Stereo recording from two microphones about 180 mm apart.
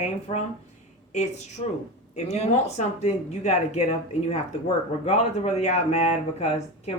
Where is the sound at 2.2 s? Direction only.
35° left (ahead or behind).